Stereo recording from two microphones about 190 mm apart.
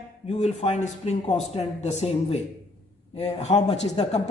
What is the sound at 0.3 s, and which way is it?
Speech, 35° left (ahead or behind).